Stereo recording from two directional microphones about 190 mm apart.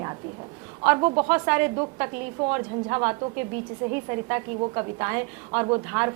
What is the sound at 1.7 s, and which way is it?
A woman's voice, 20° right (ahead or behind).